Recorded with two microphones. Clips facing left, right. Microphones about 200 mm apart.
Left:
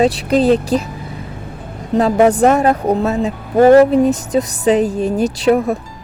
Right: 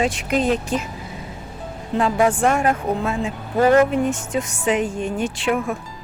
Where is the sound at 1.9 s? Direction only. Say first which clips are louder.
Left 7 dB; 40° left (ahead or behind).